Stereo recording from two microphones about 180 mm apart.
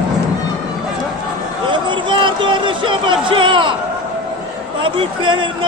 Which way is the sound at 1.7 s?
25° right (ahead or behind).